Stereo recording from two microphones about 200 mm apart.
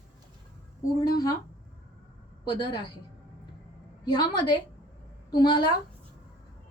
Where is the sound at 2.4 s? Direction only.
20° left (ahead or behind).